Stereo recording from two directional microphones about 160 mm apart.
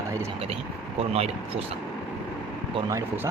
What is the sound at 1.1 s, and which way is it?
Speech, 40° right (ahead or behind).